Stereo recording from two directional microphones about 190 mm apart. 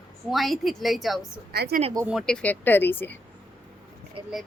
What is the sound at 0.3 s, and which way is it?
Speech, centre (ahead or behind).